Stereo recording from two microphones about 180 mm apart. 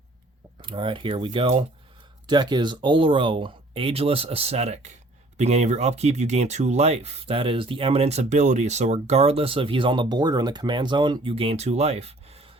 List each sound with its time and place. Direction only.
0.6 s speech: 30° right (ahead or behind)